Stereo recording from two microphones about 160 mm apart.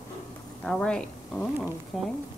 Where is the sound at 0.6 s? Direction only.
5° left (ahead or behind).